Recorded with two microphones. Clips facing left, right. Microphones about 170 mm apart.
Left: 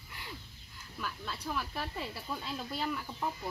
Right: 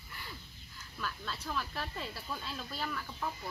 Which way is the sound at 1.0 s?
10° left (ahead or behind).